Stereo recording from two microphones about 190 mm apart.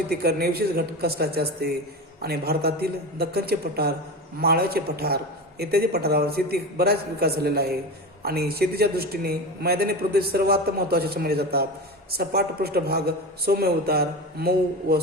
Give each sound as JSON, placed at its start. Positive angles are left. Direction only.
{"t": 0.1, "sound": "a man's voice", "side_deg": -55}